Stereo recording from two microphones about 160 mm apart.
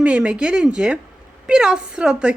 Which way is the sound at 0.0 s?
5° right (ahead or behind).